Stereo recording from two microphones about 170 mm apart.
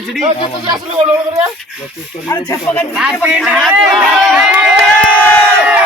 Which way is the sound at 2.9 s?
5° right (ahead or behind).